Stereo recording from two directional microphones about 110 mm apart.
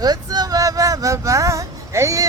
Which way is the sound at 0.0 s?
35° right (ahead or behind).